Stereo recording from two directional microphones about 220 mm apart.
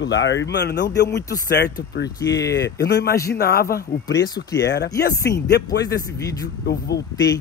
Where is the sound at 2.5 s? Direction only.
50° left (ahead or behind).